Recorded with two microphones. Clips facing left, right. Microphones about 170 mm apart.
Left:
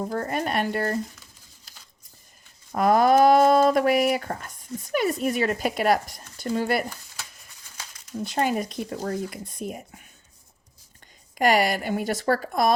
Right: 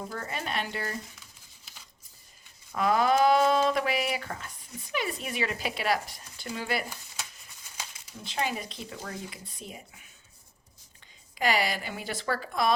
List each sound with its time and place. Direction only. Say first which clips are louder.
0.0 s speech: left 9 dB; 45° left (ahead or behind)
2.7 s speech: left 6 dB; 45° left (ahead or behind)
8.2 s speech: left 7 dB; 45° left (ahead or behind)
11.3 s speech: left 7 dB; 50° left (ahead or behind)